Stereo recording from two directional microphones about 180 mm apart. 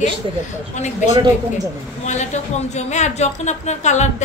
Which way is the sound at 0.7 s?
40° left (ahead or behind).